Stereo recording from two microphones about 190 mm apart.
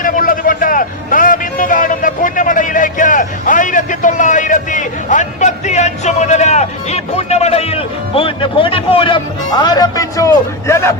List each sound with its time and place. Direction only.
0.0 s a man's voice: 45° left (ahead or behind); by 10.9 s 15° left (ahead or behind)